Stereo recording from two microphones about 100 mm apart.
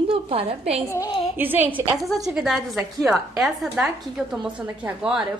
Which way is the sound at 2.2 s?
5° right (ahead or behind).